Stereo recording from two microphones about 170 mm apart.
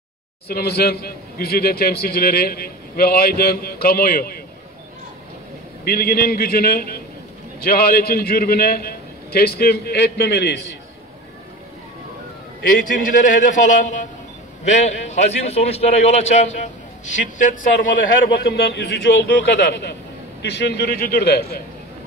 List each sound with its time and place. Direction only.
0.5 s a man's voice: 70° left (ahead or behind)
5.9 s a man's voice: 65° left (ahead or behind); by 10.8 s 80° left
12.6 s a man's voice: 55° left (ahead or behind)
18.5 s a man's voice: 75° left (ahead or behind)